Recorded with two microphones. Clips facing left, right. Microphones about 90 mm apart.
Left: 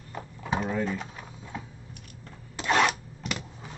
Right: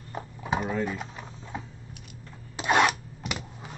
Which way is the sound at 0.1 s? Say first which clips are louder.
Right 1 dB; 15° right (ahead or behind).